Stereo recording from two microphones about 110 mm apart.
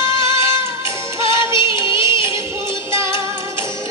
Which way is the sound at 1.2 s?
45° left (ahead or behind).